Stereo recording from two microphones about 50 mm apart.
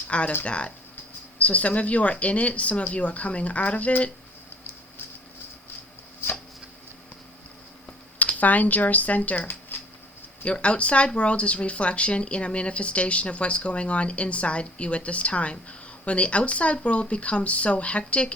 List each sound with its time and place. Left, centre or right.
0.1 s speech: left
8.4 s speech: left
10.4 s speech: left